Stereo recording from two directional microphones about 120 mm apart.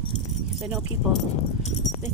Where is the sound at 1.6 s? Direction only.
75° left (ahead or behind).